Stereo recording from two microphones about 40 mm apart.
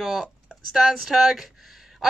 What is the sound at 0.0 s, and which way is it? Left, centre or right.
A woman's voice, centre.